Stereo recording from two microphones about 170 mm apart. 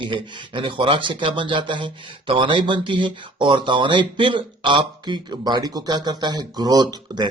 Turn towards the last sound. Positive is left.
turn(degrees=-25)  # may be behind; listen again after turning